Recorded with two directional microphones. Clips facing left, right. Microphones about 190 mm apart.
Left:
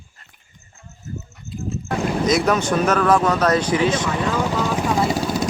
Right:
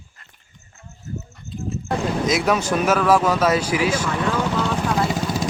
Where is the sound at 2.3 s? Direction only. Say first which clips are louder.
Left 2 dB; 5° right (ahead or behind).